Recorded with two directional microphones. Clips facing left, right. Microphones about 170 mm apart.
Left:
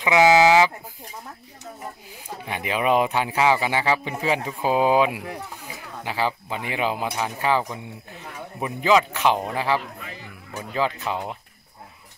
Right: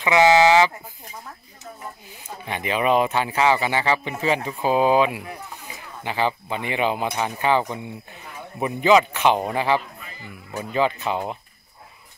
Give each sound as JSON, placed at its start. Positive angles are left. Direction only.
{"t": 0.0, "sound": "speech", "side_deg": 10}
{"t": 2.4, "sound": "a man's voice", "side_deg": 5}
{"t": 9.9, "sound": "music", "side_deg": 75}
{"t": 10.6, "sound": "a man's voice", "side_deg": 0}